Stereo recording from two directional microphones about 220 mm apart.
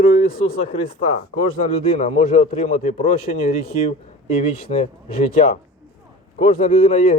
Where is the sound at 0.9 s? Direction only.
30° left (ahead or behind).